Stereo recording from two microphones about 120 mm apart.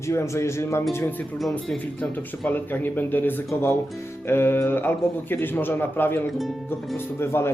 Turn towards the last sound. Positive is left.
turn(degrees=20)  # may be behind; listen again after turning